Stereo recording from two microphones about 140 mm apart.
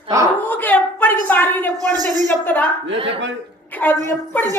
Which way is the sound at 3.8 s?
10° left (ahead or behind).